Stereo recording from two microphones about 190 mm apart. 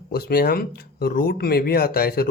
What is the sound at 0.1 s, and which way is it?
Speech, 55° left (ahead or behind).